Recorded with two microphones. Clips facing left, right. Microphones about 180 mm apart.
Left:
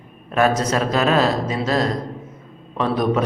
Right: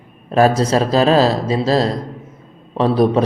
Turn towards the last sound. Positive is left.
turn(degrees=-30)  # may be behind; listen again after turning